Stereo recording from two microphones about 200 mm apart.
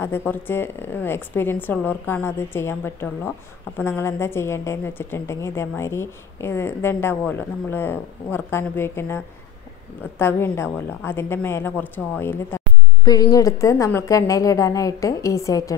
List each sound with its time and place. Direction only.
0.0 s a woman's voice: 10° left (ahead or behind)